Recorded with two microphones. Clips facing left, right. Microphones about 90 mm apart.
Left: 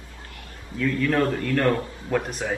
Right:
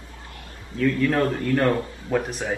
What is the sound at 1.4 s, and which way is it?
Speech, 20° right (ahead or behind).